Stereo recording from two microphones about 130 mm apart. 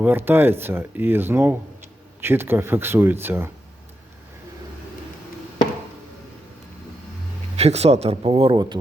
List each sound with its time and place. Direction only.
0.0 s speech: 15° right (ahead or behind)
7.5 s speech: 55° right (ahead or behind); by 8.8 s 40° right (ahead or behind)